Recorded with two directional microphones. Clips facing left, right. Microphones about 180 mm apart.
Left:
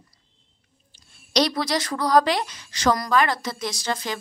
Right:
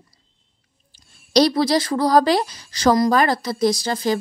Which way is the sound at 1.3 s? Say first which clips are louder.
Right 6 dB; 30° right (ahead or behind).